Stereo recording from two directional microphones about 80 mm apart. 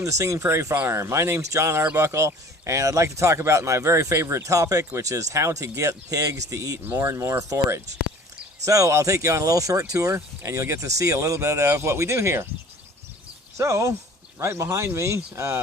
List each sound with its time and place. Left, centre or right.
0.0 s speech: right
13.6 s speech: right